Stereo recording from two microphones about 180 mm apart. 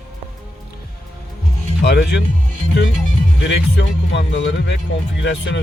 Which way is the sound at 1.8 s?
65° left (ahead or behind).